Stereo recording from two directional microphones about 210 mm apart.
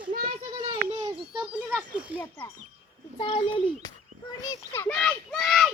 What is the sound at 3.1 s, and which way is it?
A child's voice, 25° left (ahead or behind).